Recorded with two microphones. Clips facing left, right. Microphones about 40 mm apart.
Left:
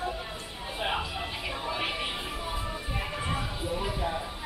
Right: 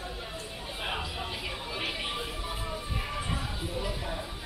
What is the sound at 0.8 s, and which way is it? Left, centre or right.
Music, centre.